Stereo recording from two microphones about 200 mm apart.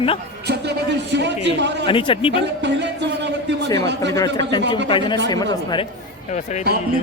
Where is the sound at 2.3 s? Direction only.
60° right (ahead or behind).